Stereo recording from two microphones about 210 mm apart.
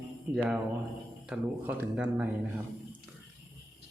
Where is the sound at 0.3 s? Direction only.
5° right (ahead or behind).